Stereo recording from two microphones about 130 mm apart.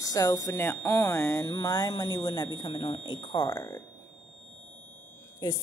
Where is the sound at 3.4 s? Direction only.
30° left (ahead or behind).